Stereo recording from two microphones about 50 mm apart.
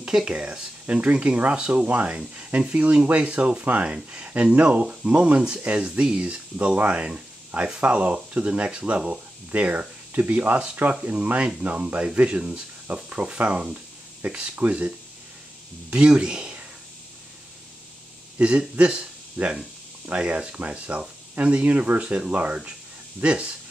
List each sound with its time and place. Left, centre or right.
0.0 s speech: centre
18.4 s speech: right
19.4 s speech: right
20.1 s speech: right